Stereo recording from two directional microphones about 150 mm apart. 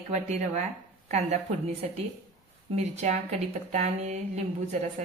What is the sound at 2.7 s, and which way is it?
Speech, 50° right (ahead or behind).